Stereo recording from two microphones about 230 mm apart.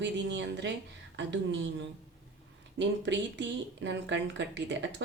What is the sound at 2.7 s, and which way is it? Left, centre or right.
Speech, right.